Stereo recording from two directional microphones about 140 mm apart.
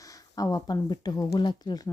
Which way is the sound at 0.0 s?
25° left (ahead or behind).